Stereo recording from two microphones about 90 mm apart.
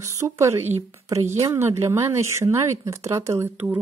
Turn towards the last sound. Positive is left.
turn(degrees=-25)  # may be behind; listen again after turning